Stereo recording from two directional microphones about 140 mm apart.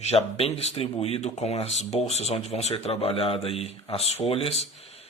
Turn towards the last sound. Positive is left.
turn(degrees=45)  # may be behind; listen again after turning